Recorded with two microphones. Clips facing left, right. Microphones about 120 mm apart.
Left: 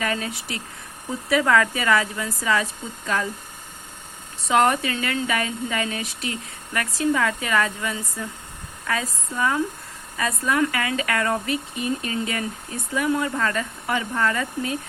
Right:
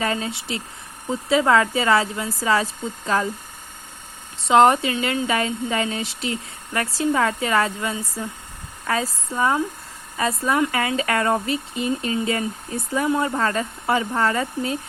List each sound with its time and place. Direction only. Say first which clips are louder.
0.0 s a woman's voice: right 2 dB; 25° right (ahead or behind)
4.4 s a woman's voice: right 4 dB; 25° right (ahead or behind)